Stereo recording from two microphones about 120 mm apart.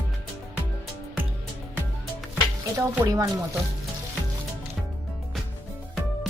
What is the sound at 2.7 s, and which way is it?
Speech, 30° right (ahead or behind).